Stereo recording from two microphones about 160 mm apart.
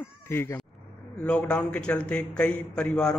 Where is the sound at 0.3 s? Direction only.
15° left (ahead or behind).